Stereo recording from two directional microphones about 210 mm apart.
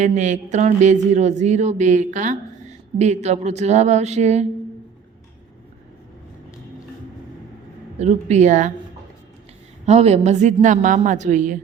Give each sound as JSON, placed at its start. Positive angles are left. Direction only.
{"t": 0.0, "sound": "speech", "side_deg": -35}
{"t": 7.9, "sound": "speech", "side_deg": -35}
{"t": 9.8, "sound": "speech", "side_deg": -30}